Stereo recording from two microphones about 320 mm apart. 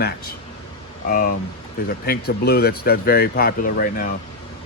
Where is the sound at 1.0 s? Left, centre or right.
Left.